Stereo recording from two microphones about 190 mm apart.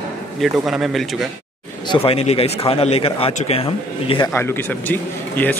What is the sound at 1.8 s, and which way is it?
Speech, 30° left (ahead or behind).